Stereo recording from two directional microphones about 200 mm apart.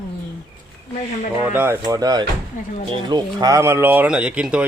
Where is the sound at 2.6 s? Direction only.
40° left (ahead or behind).